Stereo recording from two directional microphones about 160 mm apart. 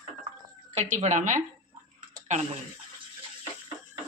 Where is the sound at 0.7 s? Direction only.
45° right (ahead or behind).